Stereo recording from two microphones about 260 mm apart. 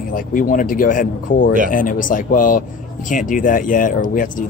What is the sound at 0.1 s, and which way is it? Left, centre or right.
Speech, left.